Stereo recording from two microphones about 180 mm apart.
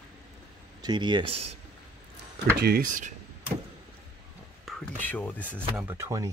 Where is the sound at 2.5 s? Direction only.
60° right (ahead or behind).